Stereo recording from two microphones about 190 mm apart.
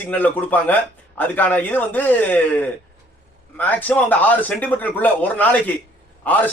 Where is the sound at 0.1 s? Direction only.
10° left (ahead or behind).